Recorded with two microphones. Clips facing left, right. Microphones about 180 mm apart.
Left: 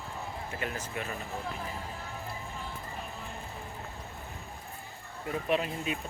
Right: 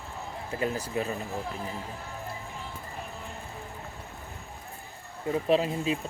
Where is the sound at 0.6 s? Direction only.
35° right (ahead or behind).